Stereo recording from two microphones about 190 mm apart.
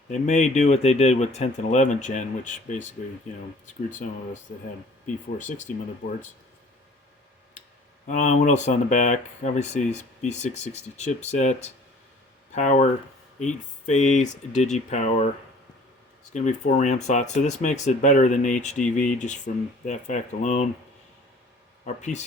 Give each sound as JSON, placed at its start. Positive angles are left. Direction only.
{"t": 0.1, "sound": "speech", "side_deg": 35}
{"t": 5.0, "sound": "speech", "side_deg": 40}
{"t": 8.0, "sound": "speech", "side_deg": 40}
{"t": 16.3, "sound": "speech", "side_deg": 40}
{"t": 21.8, "sound": "speech", "side_deg": 40}